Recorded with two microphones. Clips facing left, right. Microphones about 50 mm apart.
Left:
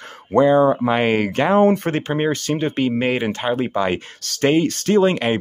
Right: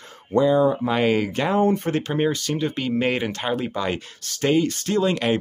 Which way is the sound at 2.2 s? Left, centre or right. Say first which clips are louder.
Left 3 dB; left.